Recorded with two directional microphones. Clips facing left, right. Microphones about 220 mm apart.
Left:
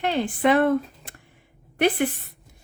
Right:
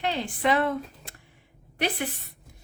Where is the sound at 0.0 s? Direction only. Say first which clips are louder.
Left 5 dB; 55° left (ahead or behind).